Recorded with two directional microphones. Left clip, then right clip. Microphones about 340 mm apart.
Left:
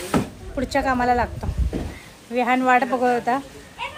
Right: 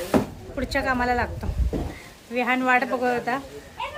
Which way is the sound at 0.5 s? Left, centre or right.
Centre.